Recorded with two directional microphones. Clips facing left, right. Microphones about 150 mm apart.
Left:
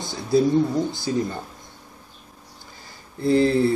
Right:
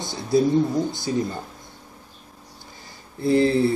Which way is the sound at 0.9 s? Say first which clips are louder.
Even; 20° right (ahead or behind).